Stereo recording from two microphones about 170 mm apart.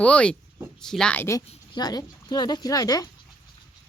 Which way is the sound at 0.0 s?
5° left (ahead or behind).